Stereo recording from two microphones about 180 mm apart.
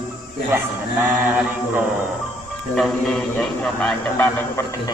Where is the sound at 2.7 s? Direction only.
Centre (ahead or behind).